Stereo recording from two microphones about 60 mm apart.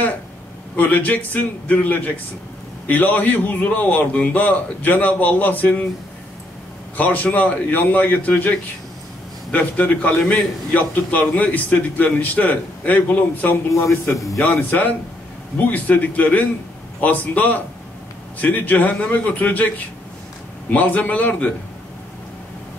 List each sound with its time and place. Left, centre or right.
0.7 s a man's voice: left
7.0 s a man's voice: left
13.7 s speech: left
15.5 s a man's voice: left
20.7 s a man's voice: left